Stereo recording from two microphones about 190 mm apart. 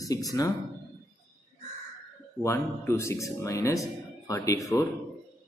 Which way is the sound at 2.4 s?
15° left (ahead or behind).